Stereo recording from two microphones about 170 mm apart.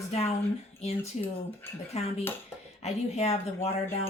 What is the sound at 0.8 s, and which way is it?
Speech, 40° left (ahead or behind).